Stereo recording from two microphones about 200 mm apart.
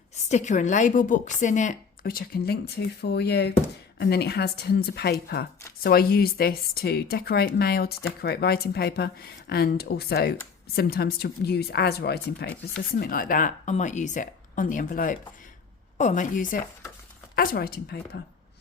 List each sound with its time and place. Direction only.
0.3 s a woman's voice: 35° left (ahead or behind); by 18.2 s 50° left (ahead or behind)